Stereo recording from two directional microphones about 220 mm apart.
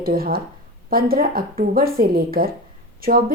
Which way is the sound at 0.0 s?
40° right (ahead or behind).